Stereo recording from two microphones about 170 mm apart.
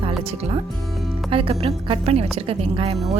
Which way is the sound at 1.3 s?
35° right (ahead or behind).